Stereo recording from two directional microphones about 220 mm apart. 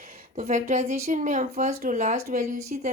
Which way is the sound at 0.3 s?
30° right (ahead or behind).